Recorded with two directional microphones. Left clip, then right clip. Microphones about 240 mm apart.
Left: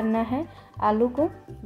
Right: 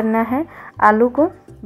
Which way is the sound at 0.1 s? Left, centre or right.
Centre.